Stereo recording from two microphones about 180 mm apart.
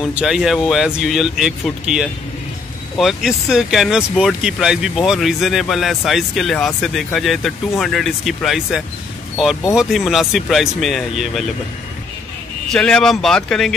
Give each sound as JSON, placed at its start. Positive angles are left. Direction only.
{"t": 0.1, "sound": "speech", "side_deg": -5}
{"t": 12.7, "sound": "speech", "side_deg": 5}